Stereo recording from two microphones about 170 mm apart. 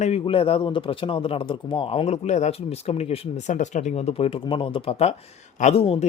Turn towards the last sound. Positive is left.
turn(degrees=35)  # may be behind; listen again after turning